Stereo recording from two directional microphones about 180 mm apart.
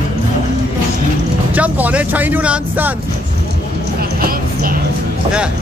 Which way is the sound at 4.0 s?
55° right (ahead or behind).